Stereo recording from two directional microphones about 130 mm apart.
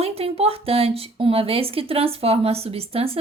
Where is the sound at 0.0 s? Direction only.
50° right (ahead or behind).